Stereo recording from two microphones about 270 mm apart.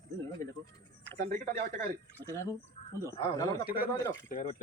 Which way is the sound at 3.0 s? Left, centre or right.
Centre.